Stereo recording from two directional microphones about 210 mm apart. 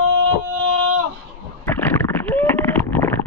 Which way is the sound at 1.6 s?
10° left (ahead or behind).